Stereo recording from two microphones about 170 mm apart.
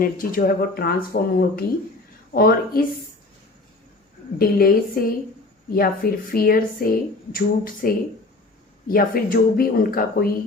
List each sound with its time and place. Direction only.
0.0 s speech: 55° left (ahead or behind)
4.4 s speech: 60° left (ahead or behind)